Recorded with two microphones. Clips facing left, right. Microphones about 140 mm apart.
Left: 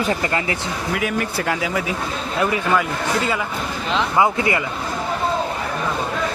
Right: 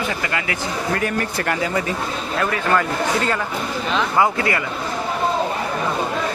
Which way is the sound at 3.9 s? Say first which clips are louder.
Left 1 dB; 20° left (ahead or behind).